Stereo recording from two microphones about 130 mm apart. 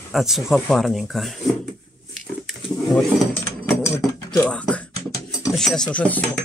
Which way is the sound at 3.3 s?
15° left (ahead or behind).